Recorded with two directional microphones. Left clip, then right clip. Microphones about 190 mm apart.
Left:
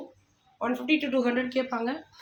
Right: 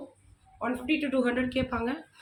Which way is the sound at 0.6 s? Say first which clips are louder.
Left 3 dB; 45° left (ahead or behind).